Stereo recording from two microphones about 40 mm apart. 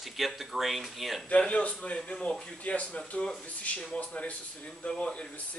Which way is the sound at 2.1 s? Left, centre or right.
Centre.